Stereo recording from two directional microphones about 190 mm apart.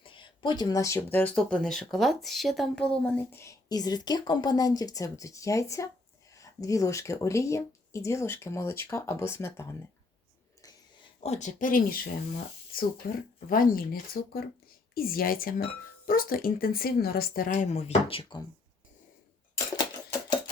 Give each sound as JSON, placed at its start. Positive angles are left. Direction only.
{"t": 0.0, "sound": "speech", "side_deg": 25}
{"t": 11.2, "sound": "speech", "side_deg": 35}
{"t": 19.7, "sound": "a sound", "side_deg": 20}